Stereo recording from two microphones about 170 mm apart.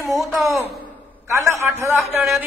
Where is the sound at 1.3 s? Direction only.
20° right (ahead or behind).